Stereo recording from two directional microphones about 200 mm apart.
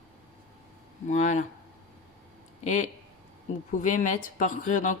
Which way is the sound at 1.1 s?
35° left (ahead or behind).